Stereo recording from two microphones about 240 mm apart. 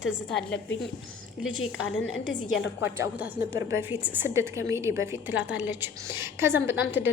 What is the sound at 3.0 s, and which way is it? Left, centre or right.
A woman's voice, centre.